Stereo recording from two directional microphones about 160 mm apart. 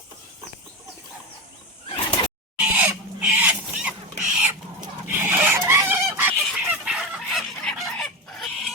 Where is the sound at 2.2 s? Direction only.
30° left (ahead or behind).